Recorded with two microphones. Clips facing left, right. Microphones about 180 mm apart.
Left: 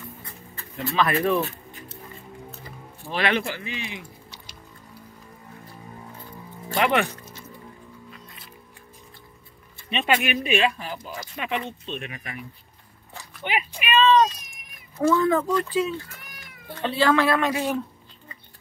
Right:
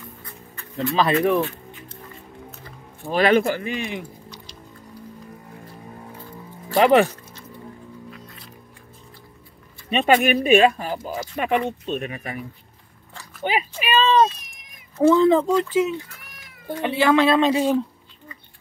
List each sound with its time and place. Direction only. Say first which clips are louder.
0.2 s music: right 1 dB; 30° left (ahead or behind)
3.1 s speech: right 7 dB; 45° right (ahead or behind)
6.7 s speech: right 7 dB; 35° right (ahead or behind)
9.8 s speech: right 6 dB; 45° right (ahead or behind); by 16.1 s 20° right (ahead or behind)
16.2 s cat: left 1 dB; centre (ahead or behind)
16.7 s speech: right 3 dB; 15° right (ahead or behind)